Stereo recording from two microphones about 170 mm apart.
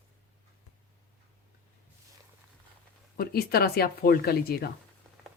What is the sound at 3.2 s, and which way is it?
Speech, 65° left (ahead or behind).